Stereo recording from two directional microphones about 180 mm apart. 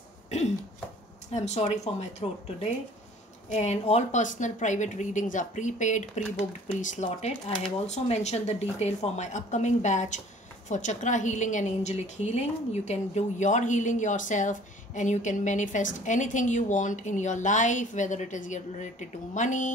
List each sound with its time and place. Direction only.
1.3 s a woman's voice: 40° left (ahead or behind)